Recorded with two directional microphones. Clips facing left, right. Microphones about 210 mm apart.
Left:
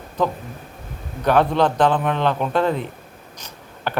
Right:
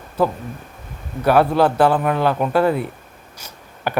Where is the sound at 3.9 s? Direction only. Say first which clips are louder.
Right 3 dB; 10° right (ahead or behind).